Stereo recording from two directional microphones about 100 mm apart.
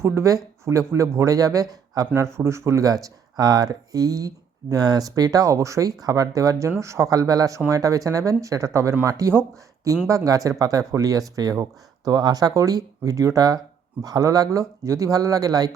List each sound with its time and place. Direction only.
0.0 s speech: 30° right (ahead or behind)